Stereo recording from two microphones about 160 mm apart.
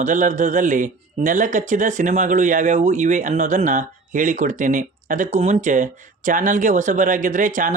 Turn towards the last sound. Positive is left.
turn(degrees=-55)  # may be behind; listen again after turning